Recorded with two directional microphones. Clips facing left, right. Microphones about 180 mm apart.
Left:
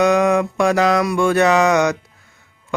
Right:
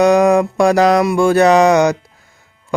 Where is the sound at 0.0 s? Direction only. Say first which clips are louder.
Right 4 dB; 35° right (ahead or behind).